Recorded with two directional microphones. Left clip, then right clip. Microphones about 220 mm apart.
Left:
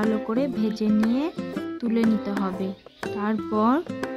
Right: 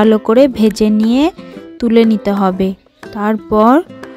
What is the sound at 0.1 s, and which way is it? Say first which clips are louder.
Speech: right 16 dB; 40° right (ahead or behind).